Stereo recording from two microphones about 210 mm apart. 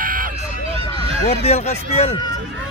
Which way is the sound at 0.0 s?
40° right (ahead or behind).